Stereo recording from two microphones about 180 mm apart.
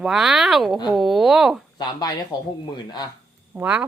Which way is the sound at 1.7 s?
25° left (ahead or behind).